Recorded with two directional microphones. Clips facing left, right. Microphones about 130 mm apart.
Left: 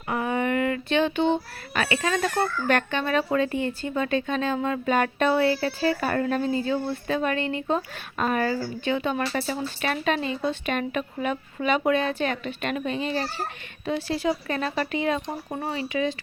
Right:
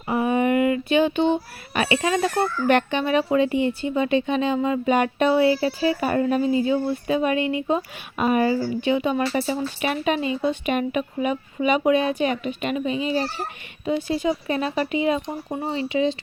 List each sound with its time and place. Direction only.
0.1 s a woman's voice: 20° right (ahead or behind)
15.6 s speech: 25° right (ahead or behind)